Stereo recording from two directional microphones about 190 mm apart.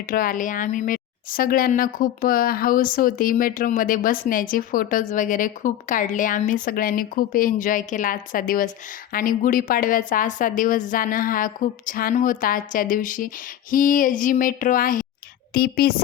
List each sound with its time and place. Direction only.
0.1 s a woman's voice: 45° left (ahead or behind)